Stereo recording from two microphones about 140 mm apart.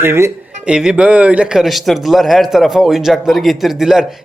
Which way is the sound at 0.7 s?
5° right (ahead or behind).